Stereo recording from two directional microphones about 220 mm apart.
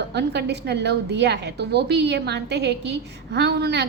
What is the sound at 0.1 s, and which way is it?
A woman's voice, 50° right (ahead or behind).